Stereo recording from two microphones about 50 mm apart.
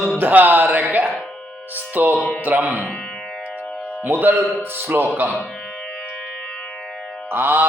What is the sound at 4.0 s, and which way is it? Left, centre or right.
A man's voice, right.